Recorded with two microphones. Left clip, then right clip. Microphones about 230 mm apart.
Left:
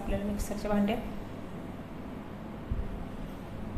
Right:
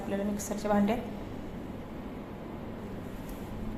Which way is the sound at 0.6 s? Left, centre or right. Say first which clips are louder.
Right 2 dB; centre.